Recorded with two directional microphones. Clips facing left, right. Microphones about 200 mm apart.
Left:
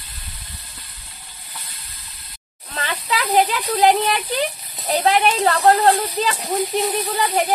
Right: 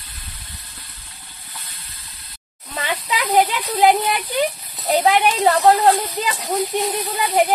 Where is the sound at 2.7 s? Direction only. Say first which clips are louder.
Even; 15° right (ahead or behind).